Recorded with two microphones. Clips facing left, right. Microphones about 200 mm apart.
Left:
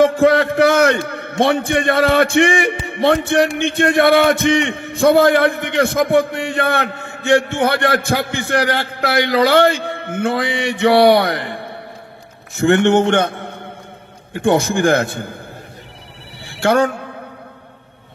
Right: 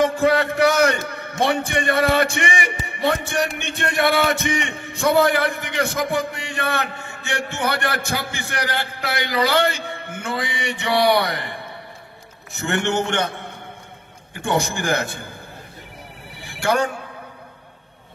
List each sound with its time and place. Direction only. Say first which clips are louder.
0.0 s a man's voice: left 6 dB; 55° left (ahead or behind)
14.3 s a man's voice: left 7 dB; 60° left (ahead or behind)
16.6 s a man's voice: left 6 dB; 60° left (ahead or behind)